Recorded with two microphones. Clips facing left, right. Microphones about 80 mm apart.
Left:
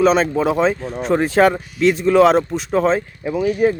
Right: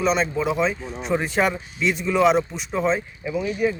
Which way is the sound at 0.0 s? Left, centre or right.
Left.